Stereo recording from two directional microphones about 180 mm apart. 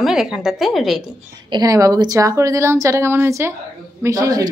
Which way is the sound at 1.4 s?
20° right (ahead or behind).